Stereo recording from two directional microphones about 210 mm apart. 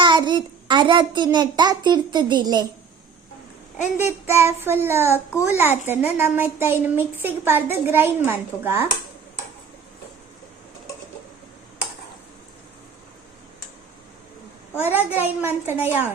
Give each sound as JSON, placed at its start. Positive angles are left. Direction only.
{"t": 0.0, "sound": "a child's voice", "side_deg": -20}
{"t": 3.9, "sound": "speech", "side_deg": -10}
{"t": 14.8, "sound": "speech", "side_deg": -10}